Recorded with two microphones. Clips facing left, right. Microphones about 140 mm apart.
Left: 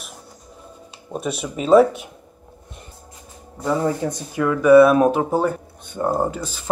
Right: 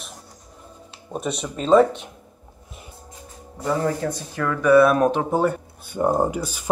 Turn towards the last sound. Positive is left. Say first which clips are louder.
# right 1 dB
turn(degrees=-15)  # may be behind; listen again after turning